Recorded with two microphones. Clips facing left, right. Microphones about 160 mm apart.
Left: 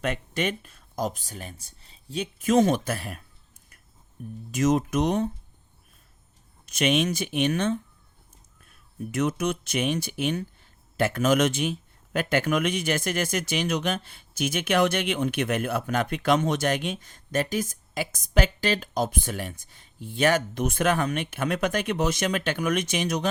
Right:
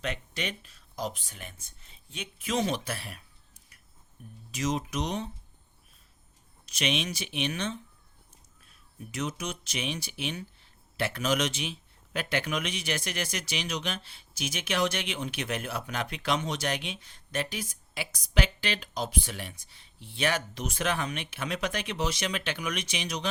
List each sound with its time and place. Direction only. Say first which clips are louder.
0.0 s speech: left 7 dB; 50° left (ahead or behind)
6.7 s speech: left 8 dB; 50° left (ahead or behind)